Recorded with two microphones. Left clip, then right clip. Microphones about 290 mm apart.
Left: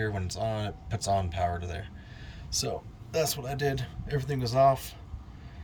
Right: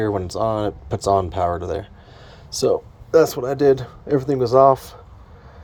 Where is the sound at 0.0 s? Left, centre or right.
Centre.